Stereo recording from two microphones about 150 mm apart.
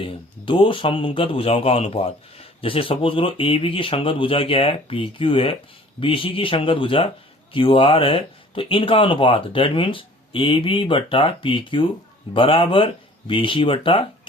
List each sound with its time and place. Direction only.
0.0 s speech: 35° left (ahead or behind)